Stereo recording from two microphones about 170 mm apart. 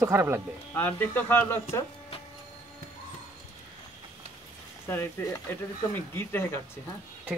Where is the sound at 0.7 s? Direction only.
10° left (ahead or behind).